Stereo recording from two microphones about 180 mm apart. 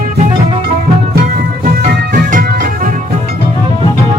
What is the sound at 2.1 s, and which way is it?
Music, 55° right (ahead or behind).